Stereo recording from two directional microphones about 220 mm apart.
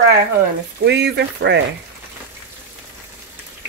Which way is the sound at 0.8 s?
50° right (ahead or behind).